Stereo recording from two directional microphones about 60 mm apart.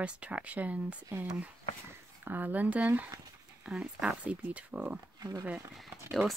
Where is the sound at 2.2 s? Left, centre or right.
Right.